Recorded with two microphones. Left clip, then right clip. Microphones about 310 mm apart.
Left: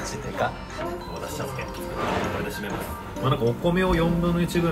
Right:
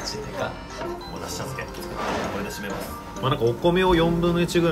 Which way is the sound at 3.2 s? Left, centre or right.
Centre.